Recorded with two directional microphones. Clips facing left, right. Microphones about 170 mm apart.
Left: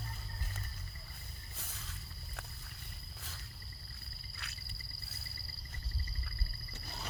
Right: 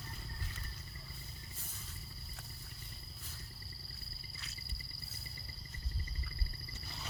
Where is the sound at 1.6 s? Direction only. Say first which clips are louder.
Left 2 dB; 90° left.